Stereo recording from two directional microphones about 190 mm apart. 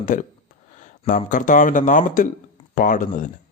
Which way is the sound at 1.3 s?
45° left (ahead or behind).